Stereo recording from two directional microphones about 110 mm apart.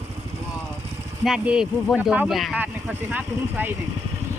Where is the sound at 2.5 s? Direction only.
15° right (ahead or behind).